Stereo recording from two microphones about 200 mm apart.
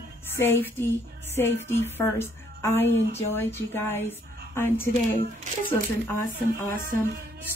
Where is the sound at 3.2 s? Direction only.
10° left (ahead or behind).